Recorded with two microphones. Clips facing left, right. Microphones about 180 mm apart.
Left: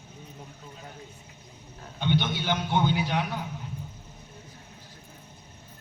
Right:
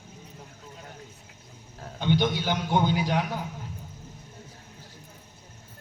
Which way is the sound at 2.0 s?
40° right (ahead or behind).